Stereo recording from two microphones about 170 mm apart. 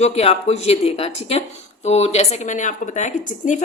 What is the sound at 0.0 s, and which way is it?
A woman's voice, 40° left (ahead or behind).